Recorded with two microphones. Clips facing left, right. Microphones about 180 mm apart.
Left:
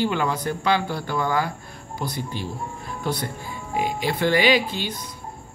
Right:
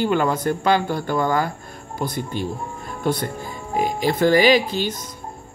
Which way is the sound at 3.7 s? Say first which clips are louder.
Right 4 dB; 40° right (ahead or behind).